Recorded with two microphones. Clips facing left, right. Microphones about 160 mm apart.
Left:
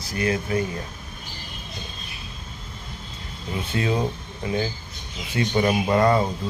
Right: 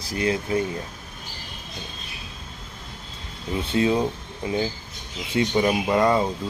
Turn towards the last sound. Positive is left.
turn(degrees=-15)  # may be behind; listen again after turning